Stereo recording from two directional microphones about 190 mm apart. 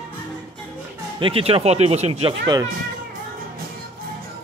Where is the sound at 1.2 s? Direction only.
30° right (ahead or behind).